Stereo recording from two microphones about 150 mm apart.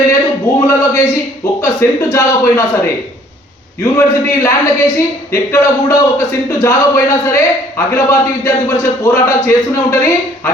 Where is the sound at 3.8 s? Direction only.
20° left (ahead or behind).